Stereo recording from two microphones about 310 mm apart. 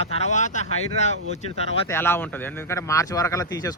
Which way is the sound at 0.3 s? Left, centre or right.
Left.